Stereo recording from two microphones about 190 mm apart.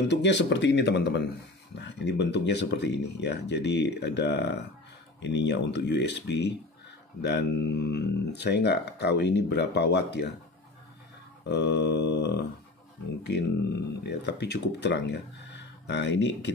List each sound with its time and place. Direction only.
0.1 s speech: 65° left (ahead or behind)
11.4 s speech: 60° left (ahead or behind)